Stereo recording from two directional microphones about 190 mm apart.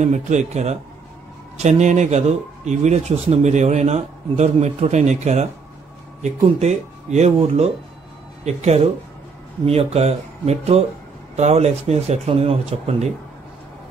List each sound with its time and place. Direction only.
0.0 s speech: 35° right (ahead or behind)